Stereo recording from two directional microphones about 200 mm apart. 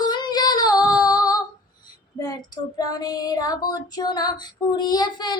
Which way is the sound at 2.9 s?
20° left (ahead or behind).